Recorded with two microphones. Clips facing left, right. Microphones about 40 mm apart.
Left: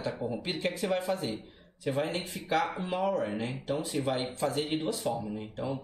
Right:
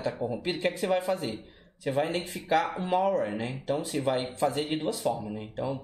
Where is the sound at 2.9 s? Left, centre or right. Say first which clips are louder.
Right 4 dB; centre.